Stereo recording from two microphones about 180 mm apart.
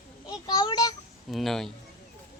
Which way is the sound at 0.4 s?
25° left (ahead or behind).